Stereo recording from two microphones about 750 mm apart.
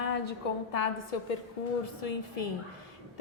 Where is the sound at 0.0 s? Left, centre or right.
Left.